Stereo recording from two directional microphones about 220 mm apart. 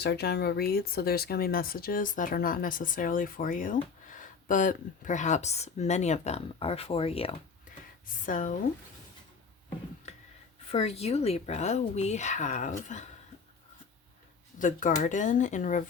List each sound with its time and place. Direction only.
0.0 s speech: 50° left (ahead or behind)
10.7 s speech: 25° left (ahead or behind)
14.6 s speech: 35° left (ahead or behind)